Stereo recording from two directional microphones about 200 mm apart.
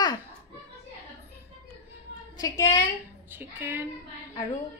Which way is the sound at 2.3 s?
15° left (ahead or behind).